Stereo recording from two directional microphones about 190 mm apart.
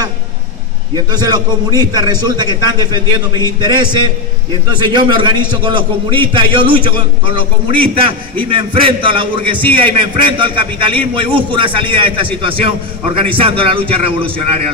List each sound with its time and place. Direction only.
0.9 s a man's voice: 20° right (ahead or behind)
9.6 s a man's voice: 10° left (ahead or behind)
9.8 s a man's voice: 25° right (ahead or behind)